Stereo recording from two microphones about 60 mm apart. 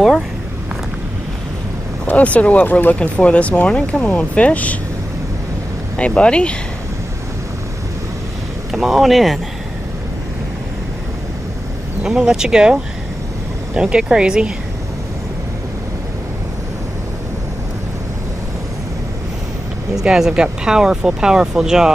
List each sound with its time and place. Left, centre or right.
2.0 s speech: left
5.9 s speech: centre
8.7 s speech: centre
12.0 s speech: centre
20.0 s speech: centre